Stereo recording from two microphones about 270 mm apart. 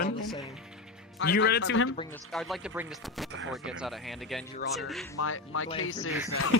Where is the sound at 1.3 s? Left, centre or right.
Left.